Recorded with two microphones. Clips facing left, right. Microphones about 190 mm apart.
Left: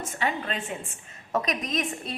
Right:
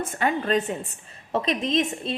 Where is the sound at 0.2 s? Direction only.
45° right (ahead or behind).